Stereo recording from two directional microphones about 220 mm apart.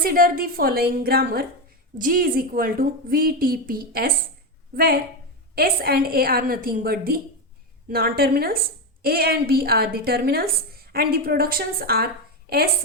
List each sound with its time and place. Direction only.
0.0 s a woman's voice: 40° right (ahead or behind)
5.5 s a woman's voice: 45° right (ahead or behind)